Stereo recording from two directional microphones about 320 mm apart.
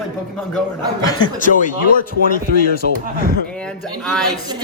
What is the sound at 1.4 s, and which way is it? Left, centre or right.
Speech, left.